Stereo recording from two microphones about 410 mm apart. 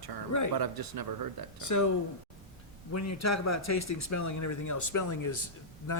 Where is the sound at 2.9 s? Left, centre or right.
Left.